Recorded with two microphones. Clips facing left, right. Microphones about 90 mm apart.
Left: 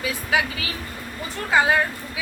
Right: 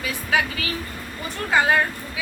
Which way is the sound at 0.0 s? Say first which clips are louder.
Even; 20° left (ahead or behind).